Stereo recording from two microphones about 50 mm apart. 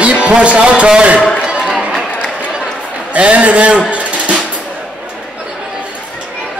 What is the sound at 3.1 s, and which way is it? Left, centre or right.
Speech, right.